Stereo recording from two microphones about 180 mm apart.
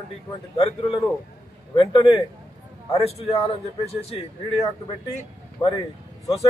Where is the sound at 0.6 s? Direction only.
30° left (ahead or behind).